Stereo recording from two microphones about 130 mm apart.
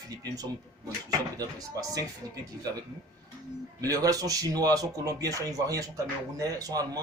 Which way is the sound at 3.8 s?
25° right (ahead or behind).